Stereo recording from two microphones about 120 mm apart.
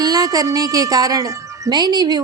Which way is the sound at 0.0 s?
35° right (ahead or behind).